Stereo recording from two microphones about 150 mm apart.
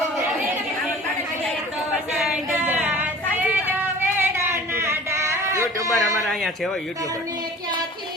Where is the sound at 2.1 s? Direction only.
5° right (ahead or behind).